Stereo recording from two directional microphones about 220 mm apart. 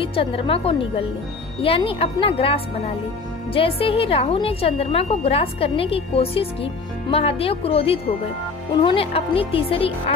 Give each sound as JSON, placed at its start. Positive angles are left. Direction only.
{"t": 0.0, "sound": "a woman's voice", "side_deg": 25}